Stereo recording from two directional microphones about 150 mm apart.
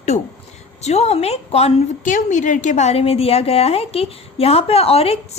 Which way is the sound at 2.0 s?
60° left (ahead or behind).